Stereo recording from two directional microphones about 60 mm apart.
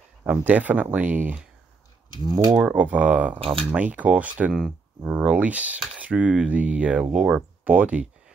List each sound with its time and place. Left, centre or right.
0.3 s speech: right
2.2 s speech: right
2.5 s speech: right
4.6 s speech: centre
5.1 s speech: right
7.6 s speech: right